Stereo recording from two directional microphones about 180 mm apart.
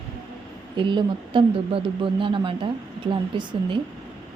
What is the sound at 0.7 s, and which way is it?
Speech, 25° right (ahead or behind).